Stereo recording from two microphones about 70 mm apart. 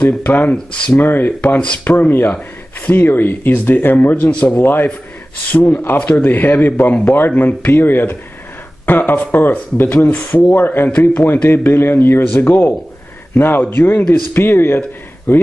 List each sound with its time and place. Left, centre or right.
0.0 s speech: left
4.3 s speech: centre
4.6 s speech: left
10.0 s speech: centre
10.5 s a man's voice: left